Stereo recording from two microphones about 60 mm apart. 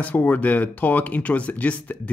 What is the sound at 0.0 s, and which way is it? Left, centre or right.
Speech, left.